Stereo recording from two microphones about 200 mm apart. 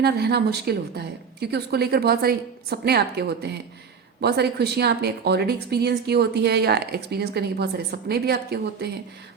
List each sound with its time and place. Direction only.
0.0 s speech: 55° right (ahead or behind)